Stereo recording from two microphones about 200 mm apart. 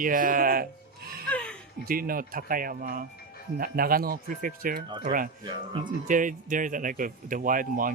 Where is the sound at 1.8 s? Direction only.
45° right (ahead or behind).